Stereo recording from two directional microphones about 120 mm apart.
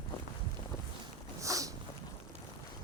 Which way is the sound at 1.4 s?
25° right (ahead or behind).